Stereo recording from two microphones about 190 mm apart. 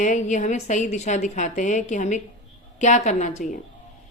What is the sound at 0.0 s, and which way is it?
A woman's voice, 40° left (ahead or behind).